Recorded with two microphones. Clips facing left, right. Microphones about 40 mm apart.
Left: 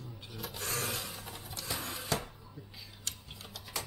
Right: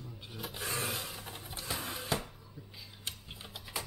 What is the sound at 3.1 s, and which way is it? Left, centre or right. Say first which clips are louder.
Tick-tock: right 1 dB; centre.